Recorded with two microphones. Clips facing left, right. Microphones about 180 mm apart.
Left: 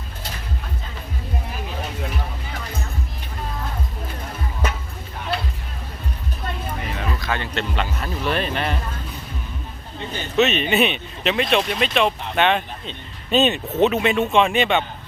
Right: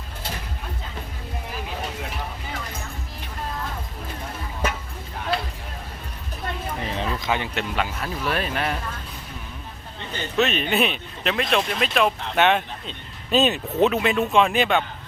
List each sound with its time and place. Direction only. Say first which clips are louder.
6.9 s a sound: right 2 dB; 30° right (ahead or behind)
7.3 s speech: even; 15° right (ahead or behind)
10.3 s speech: left 3 dB; centre (ahead or behind)